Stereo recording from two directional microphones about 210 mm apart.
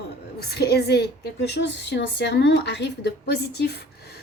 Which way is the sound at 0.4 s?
50° left (ahead or behind).